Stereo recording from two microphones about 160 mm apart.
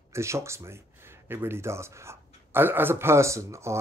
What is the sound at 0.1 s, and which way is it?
Speech, 15° right (ahead or behind).